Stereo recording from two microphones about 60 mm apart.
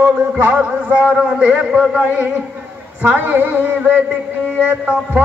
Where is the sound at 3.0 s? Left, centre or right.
Right.